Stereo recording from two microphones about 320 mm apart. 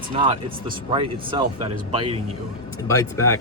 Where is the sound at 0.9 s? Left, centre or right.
Centre.